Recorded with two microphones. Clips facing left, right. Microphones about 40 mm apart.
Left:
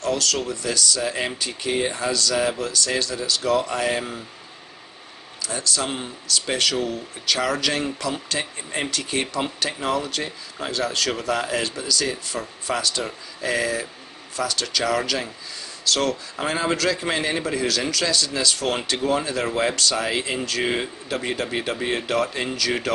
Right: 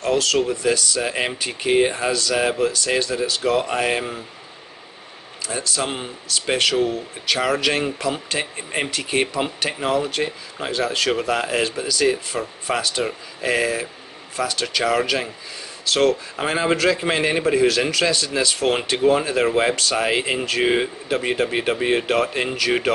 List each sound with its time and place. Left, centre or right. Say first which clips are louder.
0.0 s speech: right 5 dB; right
5.4 s speech: right 1 dB; right